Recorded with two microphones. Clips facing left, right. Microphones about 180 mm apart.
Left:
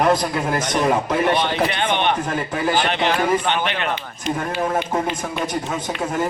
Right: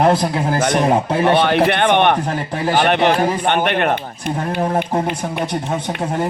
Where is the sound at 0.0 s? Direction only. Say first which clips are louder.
Right 3 dB; 30° right (ahead or behind).